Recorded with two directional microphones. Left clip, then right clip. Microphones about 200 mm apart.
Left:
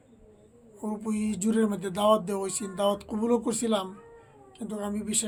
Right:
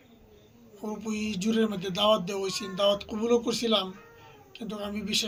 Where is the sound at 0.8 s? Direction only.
30° left (ahead or behind).